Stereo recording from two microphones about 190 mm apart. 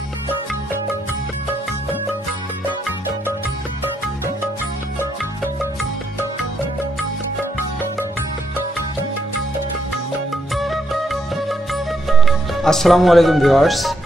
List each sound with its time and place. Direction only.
10.5 s music: centre (ahead or behind)